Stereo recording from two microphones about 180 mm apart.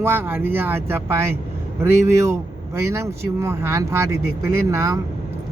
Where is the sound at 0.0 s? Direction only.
10° right (ahead or behind).